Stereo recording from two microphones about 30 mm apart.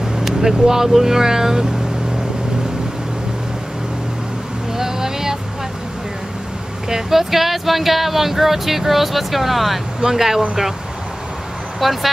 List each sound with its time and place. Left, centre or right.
0.0 s speech: centre
4.7 s vehicle: centre
7.1 s speech: centre
11.8 s speech: centre